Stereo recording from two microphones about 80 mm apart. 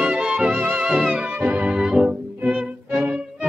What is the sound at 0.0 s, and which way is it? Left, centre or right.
Music, centre.